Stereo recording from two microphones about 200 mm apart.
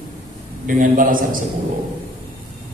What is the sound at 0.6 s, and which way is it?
Speech, 40° right (ahead or behind).